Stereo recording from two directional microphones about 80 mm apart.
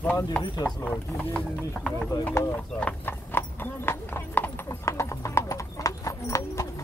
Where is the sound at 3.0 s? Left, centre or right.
Left.